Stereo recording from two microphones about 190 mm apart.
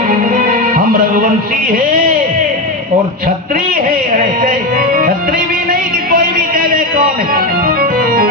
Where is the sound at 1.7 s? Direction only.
45° right (ahead or behind).